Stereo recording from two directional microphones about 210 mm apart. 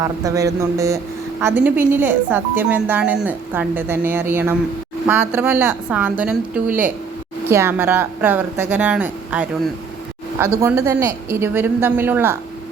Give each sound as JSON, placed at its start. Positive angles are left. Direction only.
{"t": 0.0, "sound": "speech", "side_deg": -15}
{"t": 10.6, "sound": "speech", "side_deg": -15}